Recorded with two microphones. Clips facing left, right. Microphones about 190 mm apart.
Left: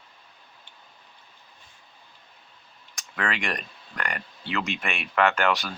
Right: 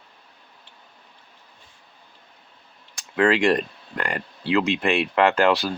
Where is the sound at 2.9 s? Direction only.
30° right (ahead or behind).